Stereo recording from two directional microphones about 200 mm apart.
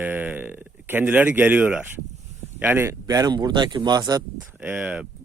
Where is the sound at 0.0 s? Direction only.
10° right (ahead or behind).